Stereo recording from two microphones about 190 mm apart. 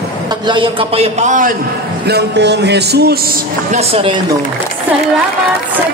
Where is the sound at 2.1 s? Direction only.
60° right (ahead or behind).